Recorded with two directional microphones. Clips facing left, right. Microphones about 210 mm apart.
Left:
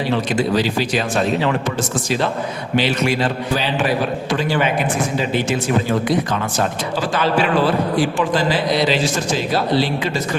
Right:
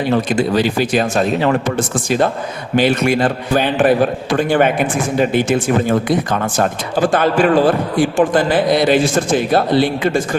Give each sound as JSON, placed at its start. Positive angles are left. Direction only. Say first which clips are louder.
{"t": 0.3, "sound": "speech", "louder": "right 3 dB", "side_deg": -50}